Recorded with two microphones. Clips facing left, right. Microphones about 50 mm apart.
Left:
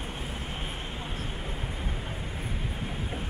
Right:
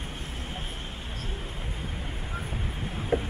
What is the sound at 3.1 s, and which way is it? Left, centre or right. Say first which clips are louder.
Vehicle: right 10 dB; right.